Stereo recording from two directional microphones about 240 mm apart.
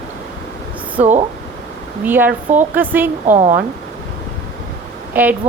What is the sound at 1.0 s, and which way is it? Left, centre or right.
Speech, right.